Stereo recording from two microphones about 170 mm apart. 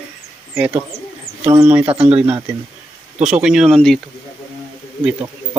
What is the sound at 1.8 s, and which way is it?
Speech, 35° right (ahead or behind).